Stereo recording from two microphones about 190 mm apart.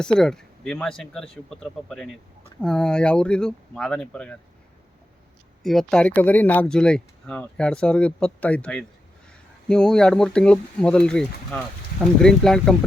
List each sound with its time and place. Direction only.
0.0 s speech: 5° left (ahead or behind)
5.6 s speech: 5° left (ahead or behind)